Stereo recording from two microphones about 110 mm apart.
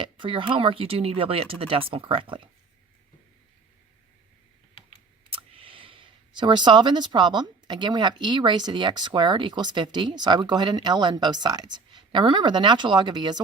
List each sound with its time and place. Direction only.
0.0 s speech: 50° right (ahead or behind)
5.3 s speech: 55° right (ahead or behind)